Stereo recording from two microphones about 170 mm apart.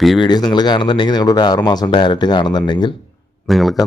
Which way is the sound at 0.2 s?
25° left (ahead or behind).